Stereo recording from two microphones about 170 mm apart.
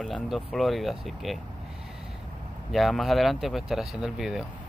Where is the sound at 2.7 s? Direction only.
Centre (ahead or behind).